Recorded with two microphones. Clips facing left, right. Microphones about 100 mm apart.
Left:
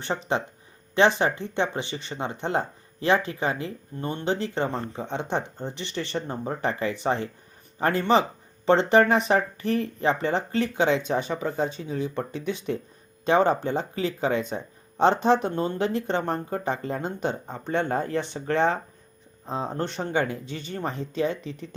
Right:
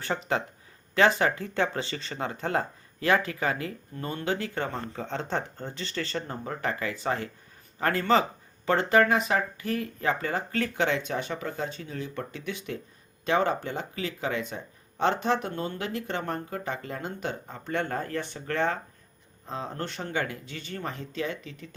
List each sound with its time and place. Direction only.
0.0 s speech: 20° left (ahead or behind)